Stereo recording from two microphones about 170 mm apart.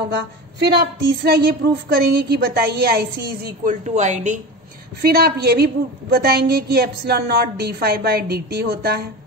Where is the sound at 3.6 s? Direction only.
45° right (ahead or behind).